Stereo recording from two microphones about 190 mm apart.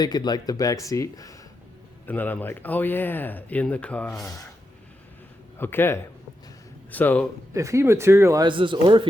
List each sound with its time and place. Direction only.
0.0 s speech: 20° left (ahead or behind); by 4.2 s 5° left (ahead or behind)
5.5 s speech: 10° left (ahead or behind)
7.5 s speech: 15° right (ahead or behind)